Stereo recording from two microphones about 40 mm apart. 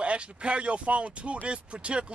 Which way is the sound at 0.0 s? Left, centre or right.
Right.